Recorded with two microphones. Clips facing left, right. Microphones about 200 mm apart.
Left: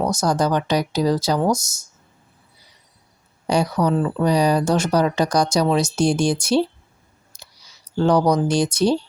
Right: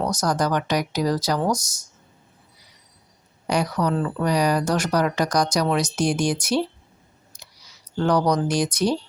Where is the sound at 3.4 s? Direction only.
30° left (ahead or behind).